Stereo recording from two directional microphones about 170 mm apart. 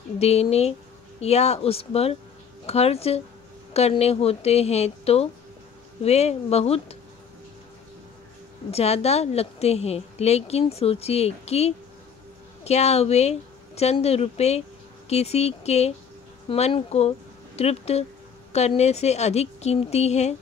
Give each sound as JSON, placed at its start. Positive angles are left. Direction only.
{"t": 0.2, "sound": "a woman's voice", "side_deg": 40}
{"t": 8.6, "sound": "a woman's voice", "side_deg": 35}